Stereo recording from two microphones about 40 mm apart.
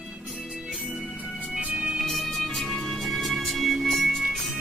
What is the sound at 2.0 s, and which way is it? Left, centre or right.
Music, centre.